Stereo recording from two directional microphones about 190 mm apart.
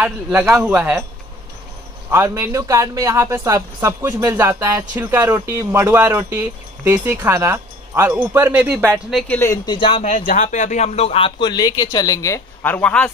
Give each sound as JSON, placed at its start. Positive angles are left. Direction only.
{"t": 0.0, "sound": "speech", "side_deg": -10}
{"t": 2.0, "sound": "speech", "side_deg": -15}
{"t": 9.1, "sound": "speech", "side_deg": 10}
{"t": 9.8, "sound": "speech", "side_deg": 25}
{"t": 10.1, "sound": "speech", "side_deg": 45}